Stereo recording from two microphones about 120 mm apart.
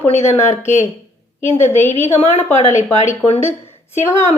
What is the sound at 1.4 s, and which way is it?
A woman's voice, 60° left (ahead or behind).